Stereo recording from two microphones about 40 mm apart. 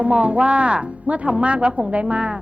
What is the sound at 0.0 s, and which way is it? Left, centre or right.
A woman's voice, right.